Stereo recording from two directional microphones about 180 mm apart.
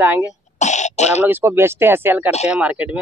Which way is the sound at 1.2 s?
10° right (ahead or behind).